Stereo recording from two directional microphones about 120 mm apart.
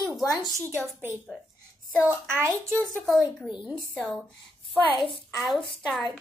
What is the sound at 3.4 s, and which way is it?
Speech, 10° right (ahead or behind).